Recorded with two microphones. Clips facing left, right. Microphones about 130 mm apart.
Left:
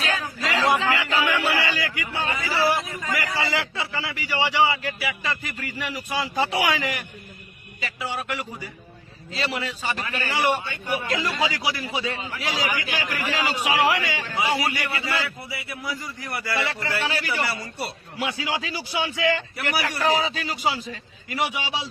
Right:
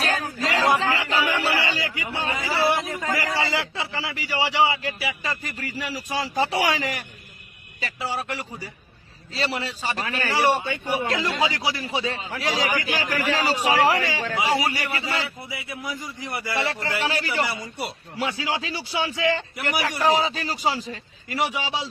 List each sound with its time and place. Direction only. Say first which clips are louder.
0.0 s chatter: right 2 dB; 45° right (ahead or behind)
0.8 s music: even; 35° right (ahead or behind)
1.6 s a man's voice: even; 25° right (ahead or behind)
17.4 s a man's voice: even; 15° right (ahead or behind)
18.3 s a man's voice: right 1 dB; 30° right (ahead or behind)